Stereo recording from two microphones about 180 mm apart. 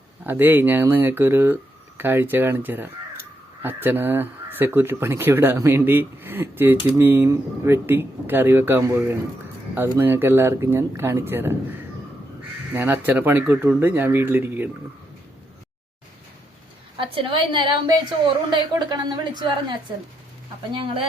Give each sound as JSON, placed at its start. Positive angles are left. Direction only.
{"t": 0.3, "sound": "speech", "side_deg": -10}
{"t": 12.7, "sound": "speech", "side_deg": -10}
{"t": 17.0, "sound": "a woman's voice", "side_deg": -25}
{"t": 20.7, "sound": "a woman's voice", "side_deg": -30}